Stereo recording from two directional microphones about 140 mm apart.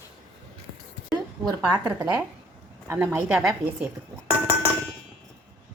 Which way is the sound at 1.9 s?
15° right (ahead or behind).